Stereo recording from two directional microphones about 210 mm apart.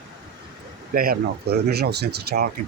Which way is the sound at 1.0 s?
45° right (ahead or behind).